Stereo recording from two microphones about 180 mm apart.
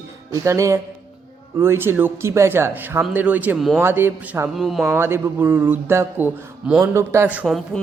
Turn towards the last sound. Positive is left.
turn(degrees=0)  # may be behind; listen again after turning